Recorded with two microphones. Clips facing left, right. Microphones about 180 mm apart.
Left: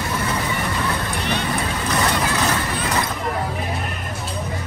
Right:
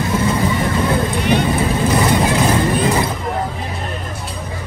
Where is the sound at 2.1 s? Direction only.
25° right (ahead or behind).